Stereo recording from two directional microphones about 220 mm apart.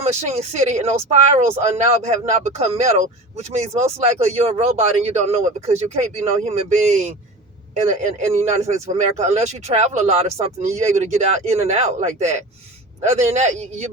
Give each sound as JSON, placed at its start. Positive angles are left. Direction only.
{"t": 0.0, "sound": "speech", "side_deg": -30}
{"t": 7.9, "sound": "speech", "side_deg": -30}